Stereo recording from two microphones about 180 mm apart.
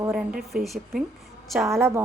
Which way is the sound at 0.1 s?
5° right (ahead or behind).